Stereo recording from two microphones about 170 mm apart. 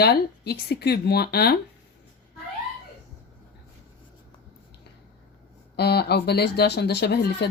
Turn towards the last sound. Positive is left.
turn(degrees=75)  # may be behind; listen again after turning